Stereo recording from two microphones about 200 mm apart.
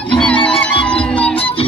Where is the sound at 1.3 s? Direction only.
25° left (ahead or behind).